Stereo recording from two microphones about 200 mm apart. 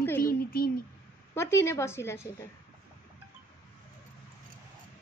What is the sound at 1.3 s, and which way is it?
A woman's voice, 15° left (ahead or behind).